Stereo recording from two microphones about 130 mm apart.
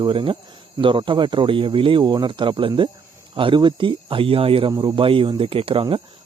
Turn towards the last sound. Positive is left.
turn(degrees=-40)  # may be behind; listen again after turning